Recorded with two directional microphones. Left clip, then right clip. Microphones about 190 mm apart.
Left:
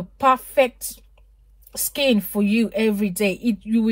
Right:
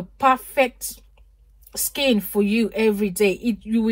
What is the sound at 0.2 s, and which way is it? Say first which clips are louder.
Speech: left 1 dB; 30° left (ahead or behind).